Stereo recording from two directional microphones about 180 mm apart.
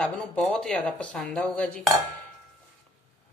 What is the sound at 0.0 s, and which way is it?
A woman's voice, 5° left (ahead or behind).